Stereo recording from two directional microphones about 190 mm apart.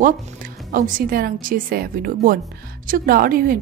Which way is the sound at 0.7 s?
45° right (ahead or behind).